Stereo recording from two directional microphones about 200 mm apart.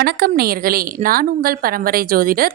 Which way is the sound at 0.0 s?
50° right (ahead or behind).